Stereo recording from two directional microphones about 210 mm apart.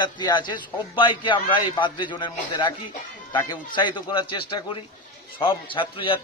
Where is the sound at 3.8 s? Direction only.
20° left (ahead or behind).